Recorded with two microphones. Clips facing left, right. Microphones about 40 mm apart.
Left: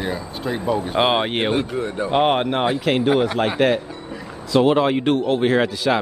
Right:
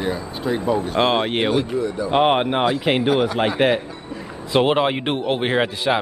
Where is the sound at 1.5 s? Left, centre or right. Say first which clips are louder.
Right 1 dB; left.